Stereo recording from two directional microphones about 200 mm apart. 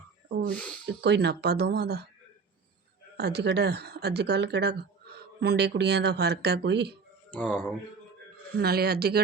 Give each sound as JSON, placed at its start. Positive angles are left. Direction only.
{"t": 0.3, "sound": "speech", "side_deg": -55}
{"t": 3.2, "sound": "speech", "side_deg": -55}
{"t": 8.5, "sound": "speech", "side_deg": -50}